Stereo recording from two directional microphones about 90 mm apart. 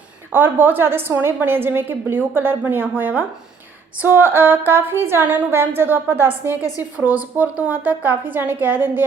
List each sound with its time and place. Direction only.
0.3 s a woman's voice: 20° right (ahead or behind)